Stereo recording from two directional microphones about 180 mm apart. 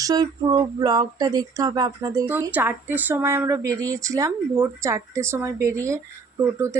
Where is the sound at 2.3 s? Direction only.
10° right (ahead or behind).